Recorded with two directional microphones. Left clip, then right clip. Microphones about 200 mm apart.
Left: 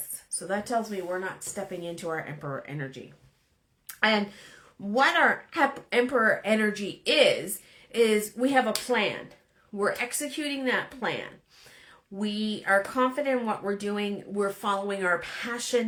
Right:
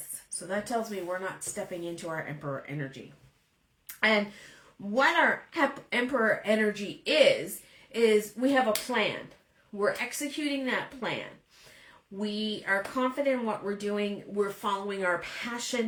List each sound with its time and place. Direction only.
0.3 s speech: 35° left (ahead or behind)
12.2 s speech: 40° left (ahead or behind)